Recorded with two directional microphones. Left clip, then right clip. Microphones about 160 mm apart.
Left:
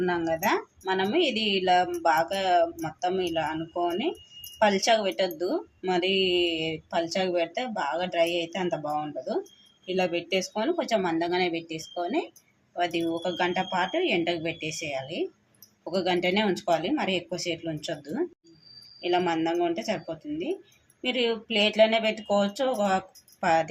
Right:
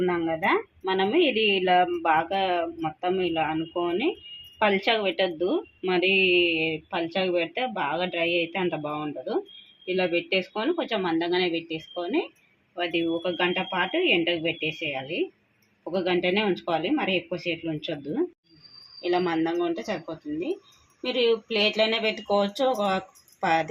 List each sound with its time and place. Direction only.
0.0 s speech: 20° right (ahead or behind)
21.1 s speech: 30° right (ahead or behind)